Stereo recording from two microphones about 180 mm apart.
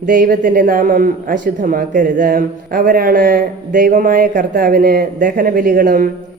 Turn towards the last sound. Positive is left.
turn(degrees=-50)  # may be behind; listen again after turning